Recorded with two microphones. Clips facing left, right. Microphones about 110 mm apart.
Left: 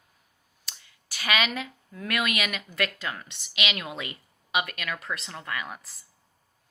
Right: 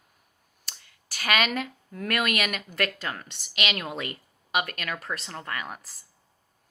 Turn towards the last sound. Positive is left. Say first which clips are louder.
# even
turn(degrees=-45)  # may be behind; listen again after turning